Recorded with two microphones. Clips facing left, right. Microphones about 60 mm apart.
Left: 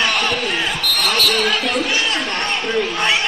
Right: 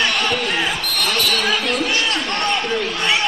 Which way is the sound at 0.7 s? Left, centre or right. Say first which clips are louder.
Left 2 dB; left.